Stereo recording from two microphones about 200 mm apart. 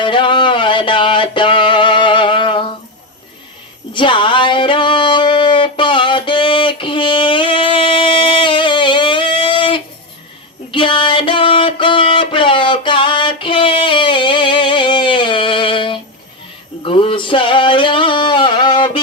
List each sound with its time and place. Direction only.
0.0 s music: 25° left (ahead or behind)
3.9 s a sound: 25° left (ahead or behind)
16.8 s singing: 25° left (ahead or behind)